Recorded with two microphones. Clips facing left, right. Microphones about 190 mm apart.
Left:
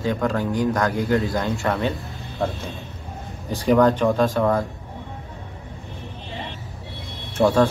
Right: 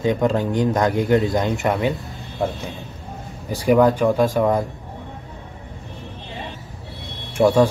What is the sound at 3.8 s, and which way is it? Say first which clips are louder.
Speech: right 1 dB; 5° right (ahead or behind).